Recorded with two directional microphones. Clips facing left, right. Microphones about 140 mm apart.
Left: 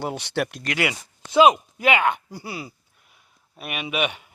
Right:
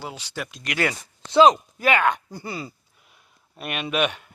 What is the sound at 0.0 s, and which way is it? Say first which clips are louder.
Speech: left 7 dB; 60° left (ahead or behind).